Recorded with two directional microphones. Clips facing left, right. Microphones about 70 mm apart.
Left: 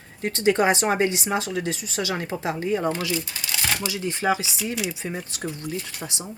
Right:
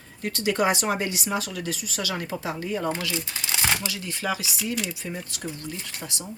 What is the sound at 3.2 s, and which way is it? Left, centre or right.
Speech, right.